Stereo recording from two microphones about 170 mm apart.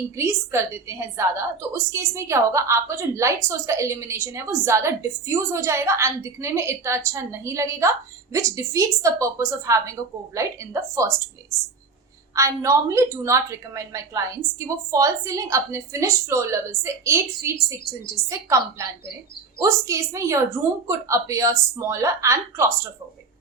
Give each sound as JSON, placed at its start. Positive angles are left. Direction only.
{"t": 0.2, "sound": "a woman's voice", "side_deg": -15}
{"t": 12.3, "sound": "a woman's voice", "side_deg": -20}